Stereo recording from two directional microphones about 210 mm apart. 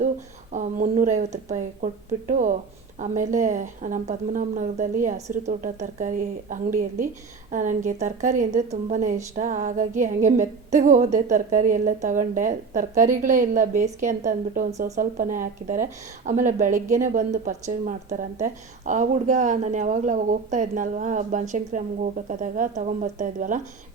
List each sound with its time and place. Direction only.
0.5 s speech: 35° right (ahead or behind)